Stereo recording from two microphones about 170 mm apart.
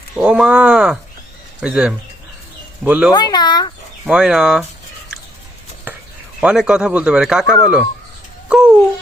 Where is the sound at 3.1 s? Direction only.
25° left (ahead or behind).